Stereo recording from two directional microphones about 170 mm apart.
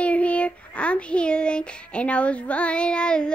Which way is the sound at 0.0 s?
10° left (ahead or behind).